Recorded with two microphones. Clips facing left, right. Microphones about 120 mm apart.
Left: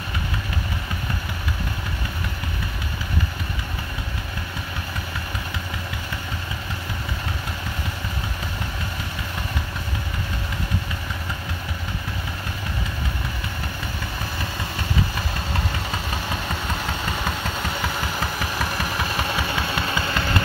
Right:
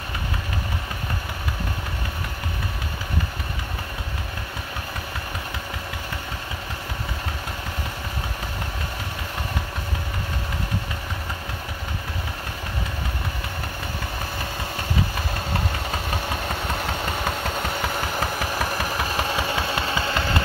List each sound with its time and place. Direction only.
15.9 s engine: 50° right (ahead or behind); by 20.4 s 25° right (ahead or behind)